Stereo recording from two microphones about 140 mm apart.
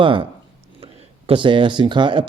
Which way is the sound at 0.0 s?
35° right (ahead or behind).